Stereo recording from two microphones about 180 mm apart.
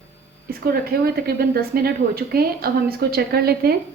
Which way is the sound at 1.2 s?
60° right (ahead or behind).